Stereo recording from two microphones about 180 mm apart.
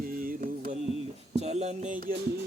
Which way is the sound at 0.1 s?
50° right (ahead or behind).